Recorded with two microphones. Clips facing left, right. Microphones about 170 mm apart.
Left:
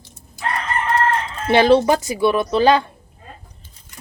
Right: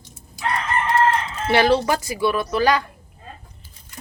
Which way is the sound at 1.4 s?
20° left (ahead or behind).